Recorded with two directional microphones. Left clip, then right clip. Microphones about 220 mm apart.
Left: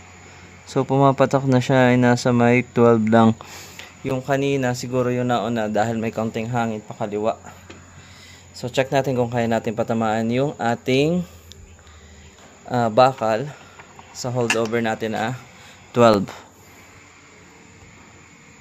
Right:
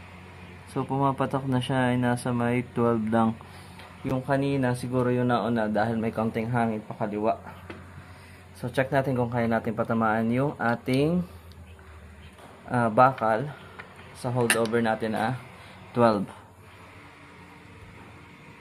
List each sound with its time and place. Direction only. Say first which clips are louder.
0.7 s speech: left 9 dB; 45° left (ahead or behind)
8.5 s speech: left 5 dB; 40° left (ahead or behind)
12.6 s speech: left 4 dB; 40° left (ahead or behind)